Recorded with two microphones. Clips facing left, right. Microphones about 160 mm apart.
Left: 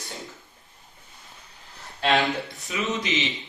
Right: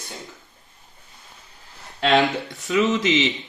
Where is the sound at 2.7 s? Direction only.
75° right (ahead or behind).